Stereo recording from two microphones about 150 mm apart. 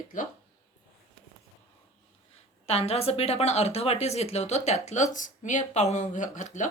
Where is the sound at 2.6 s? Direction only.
40° left (ahead or behind).